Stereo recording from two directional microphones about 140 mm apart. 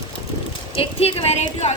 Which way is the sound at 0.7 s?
40° left (ahead or behind).